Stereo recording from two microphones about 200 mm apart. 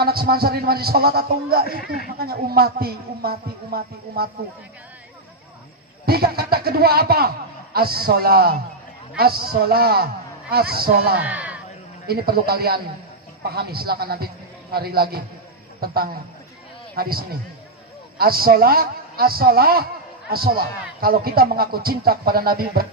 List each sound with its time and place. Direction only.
0.0 s a man's voice: 50° right (ahead or behind)
6.1 s a man's voice: 50° right (ahead or behind)
11.2 s speech: 5° right (ahead or behind)
12.0 s a man's voice: 50° right (ahead or behind)